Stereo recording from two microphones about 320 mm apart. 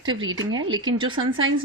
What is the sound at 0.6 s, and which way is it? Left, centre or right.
Speech, right.